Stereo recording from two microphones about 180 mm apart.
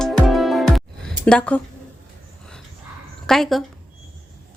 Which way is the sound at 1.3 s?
5° left (ahead or behind).